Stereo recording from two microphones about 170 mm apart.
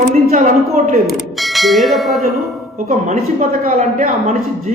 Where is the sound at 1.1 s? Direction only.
Centre (ahead or behind).